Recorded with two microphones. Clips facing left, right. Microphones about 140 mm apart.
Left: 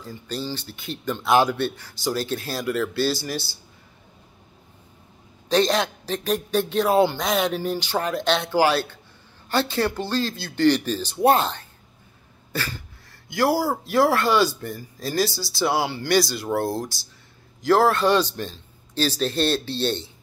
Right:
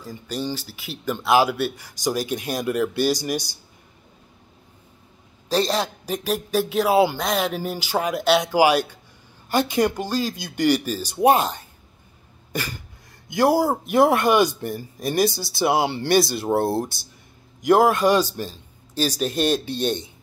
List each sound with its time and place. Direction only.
0.0 s speech: 15° right (ahead or behind)
5.5 s speech: centre (ahead or behind)
13.3 s speech: 20° right (ahead or behind)